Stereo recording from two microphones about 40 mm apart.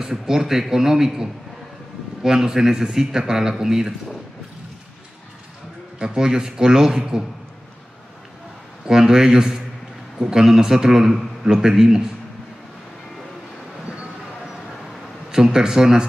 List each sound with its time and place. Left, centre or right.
0.0 s speech: centre
5.9 s speech: centre
8.8 s speech: centre
15.3 s speech: centre